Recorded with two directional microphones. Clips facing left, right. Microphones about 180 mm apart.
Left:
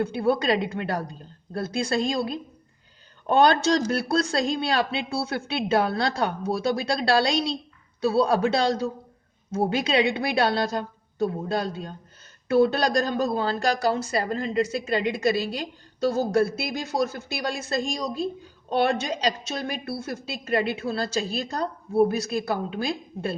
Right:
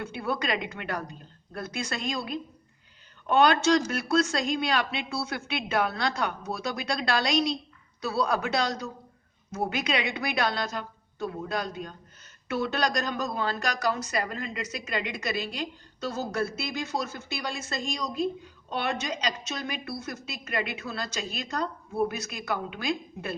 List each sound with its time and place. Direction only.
0.0 s a woman's voice: 35° left (ahead or behind)